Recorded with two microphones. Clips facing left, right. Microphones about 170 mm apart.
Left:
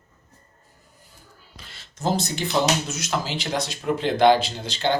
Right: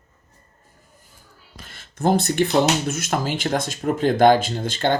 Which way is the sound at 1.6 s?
50° right (ahead or behind).